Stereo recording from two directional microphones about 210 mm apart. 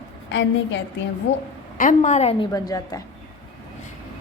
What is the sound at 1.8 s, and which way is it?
Speech, 35° left (ahead or behind).